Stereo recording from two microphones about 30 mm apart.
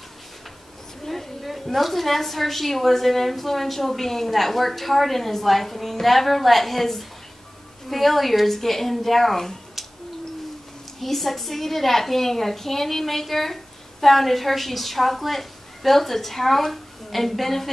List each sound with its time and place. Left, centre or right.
1.0 s a woman's voice: centre
11.0 s a woman's voice: centre